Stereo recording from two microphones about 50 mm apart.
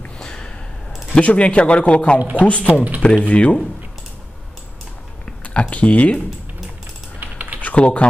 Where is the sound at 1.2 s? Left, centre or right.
Left.